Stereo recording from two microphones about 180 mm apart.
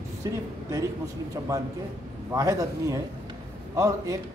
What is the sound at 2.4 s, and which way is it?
A man's voice, 20° right (ahead or behind).